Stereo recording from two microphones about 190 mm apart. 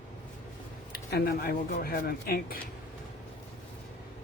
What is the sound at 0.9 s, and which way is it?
Speech, 55° left (ahead or behind).